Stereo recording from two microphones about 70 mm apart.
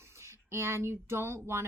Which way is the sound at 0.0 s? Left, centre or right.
Right.